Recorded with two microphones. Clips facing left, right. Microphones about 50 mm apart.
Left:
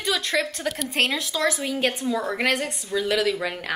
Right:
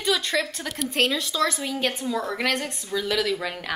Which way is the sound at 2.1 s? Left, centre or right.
Centre.